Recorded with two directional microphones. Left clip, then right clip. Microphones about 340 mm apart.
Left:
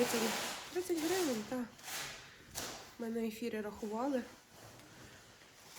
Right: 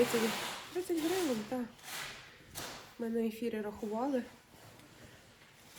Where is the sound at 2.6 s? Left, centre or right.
Left.